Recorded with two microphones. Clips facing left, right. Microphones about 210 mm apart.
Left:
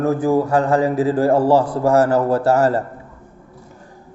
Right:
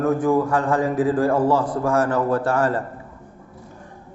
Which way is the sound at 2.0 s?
35° left (ahead or behind).